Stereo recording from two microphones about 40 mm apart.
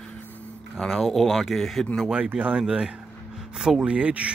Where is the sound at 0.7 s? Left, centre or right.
Centre.